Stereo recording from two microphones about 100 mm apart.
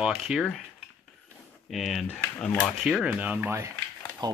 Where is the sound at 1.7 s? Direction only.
Centre (ahead or behind).